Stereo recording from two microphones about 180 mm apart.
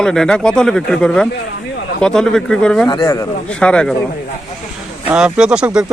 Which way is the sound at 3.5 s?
5° left (ahead or behind).